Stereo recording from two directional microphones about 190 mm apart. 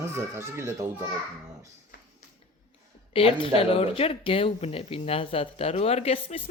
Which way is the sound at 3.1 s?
30° left (ahead or behind).